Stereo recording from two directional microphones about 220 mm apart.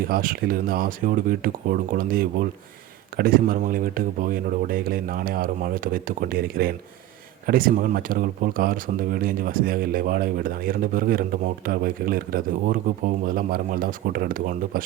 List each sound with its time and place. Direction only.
0.1 s speech: 40° right (ahead or behind)